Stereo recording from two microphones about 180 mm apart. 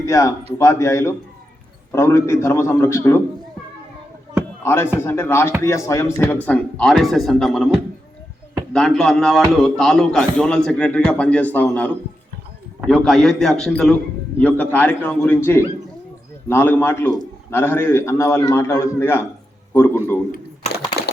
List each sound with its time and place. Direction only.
0.0 s a man's voice: 15° left (ahead or behind)
4.6 s a man's voice: 15° left (ahead or behind)
12.9 s a man's voice: centre (ahead or behind)
20.3 s a sound: 65° left (ahead or behind)